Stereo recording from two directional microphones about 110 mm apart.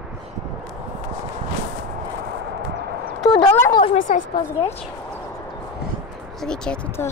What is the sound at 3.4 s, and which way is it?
Speech, 25° left (ahead or behind).